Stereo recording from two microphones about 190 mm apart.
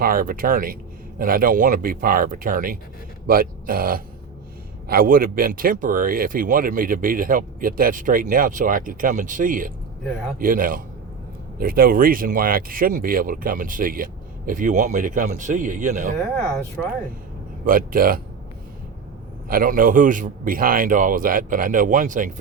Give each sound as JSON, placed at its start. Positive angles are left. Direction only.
{"t": 0.0, "sound": "speech", "side_deg": -50}
{"t": 17.7, "sound": "speech", "side_deg": -50}
{"t": 19.5, "sound": "speech", "side_deg": -50}